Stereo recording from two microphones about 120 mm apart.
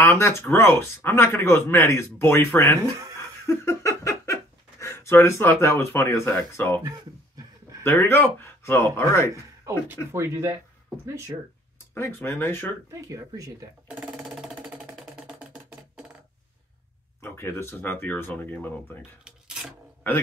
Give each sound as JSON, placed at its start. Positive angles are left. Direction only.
{"t": 0.0, "sound": "speech", "side_deg": 20}
{"t": 3.2, "sound": "laughter", "side_deg": 25}
{"t": 6.8, "sound": "a sound", "side_deg": -30}
{"t": 7.8, "sound": "speech", "side_deg": 20}
{"t": 10.1, "sound": "speech", "side_deg": -20}
{"t": 11.9, "sound": "speech", "side_deg": 20}
{"t": 13.1, "sound": "speech", "side_deg": -30}
{"t": 14.1, "sound": "music", "side_deg": -5}
{"t": 17.2, "sound": "speech", "side_deg": 20}
{"t": 19.2, "sound": "a sound", "side_deg": -5}